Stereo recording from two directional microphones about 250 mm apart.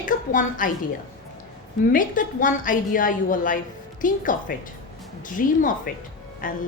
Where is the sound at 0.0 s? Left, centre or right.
Left.